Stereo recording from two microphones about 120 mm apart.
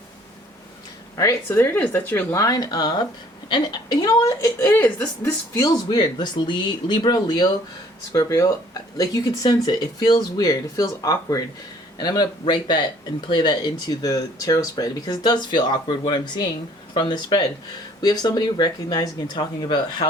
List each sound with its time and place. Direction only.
1.1 s a woman's voice: 25° left (ahead or behind)
5.5 s a woman's voice: 30° left (ahead or behind)